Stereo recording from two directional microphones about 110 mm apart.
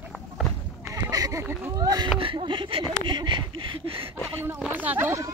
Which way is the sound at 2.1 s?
50° right (ahead or behind).